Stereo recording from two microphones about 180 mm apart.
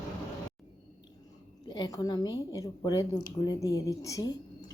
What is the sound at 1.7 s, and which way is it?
A woman's voice, 20° left (ahead or behind).